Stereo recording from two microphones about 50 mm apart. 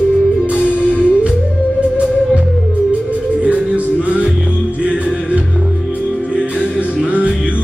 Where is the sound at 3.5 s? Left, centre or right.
Right.